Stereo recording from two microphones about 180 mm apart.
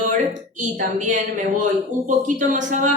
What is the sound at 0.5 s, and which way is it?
A woman's voice, 45° right (ahead or behind).